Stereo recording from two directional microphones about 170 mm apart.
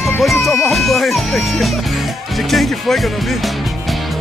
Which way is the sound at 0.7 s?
Centre (ahead or behind).